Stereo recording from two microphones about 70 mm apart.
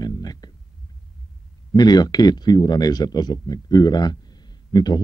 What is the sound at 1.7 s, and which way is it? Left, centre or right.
Speech, left.